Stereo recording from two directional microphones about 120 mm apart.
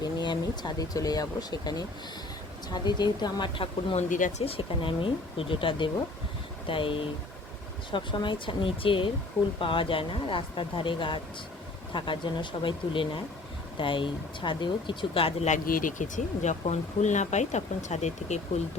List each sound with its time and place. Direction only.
0.0 s speech: 35° left (ahead or behind)
3.9 s speech: 80° left
4.4 s speech: 50° left (ahead or behind)
15.4 s speech: 90° left; by 18.3 s 75° left (ahead or behind)